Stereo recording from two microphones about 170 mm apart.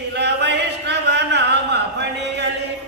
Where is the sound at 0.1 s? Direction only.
85° right.